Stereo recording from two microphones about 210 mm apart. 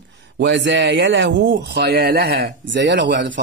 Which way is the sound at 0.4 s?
60° right (ahead or behind).